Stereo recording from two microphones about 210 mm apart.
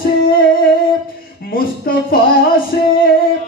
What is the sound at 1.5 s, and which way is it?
Speech, 45° left (ahead or behind).